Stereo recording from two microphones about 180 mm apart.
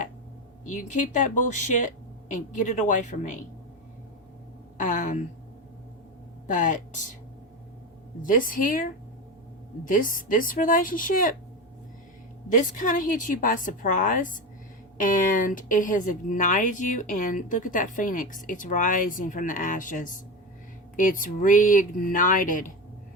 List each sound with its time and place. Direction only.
0.7 s speech: 45° left (ahead or behind)
4.8 s a sound: 45° left (ahead or behind)
6.5 s speech: 45° left (ahead or behind)
8.2 s speech: 50° left (ahead or behind)
12.5 s speech: 45° left (ahead or behind)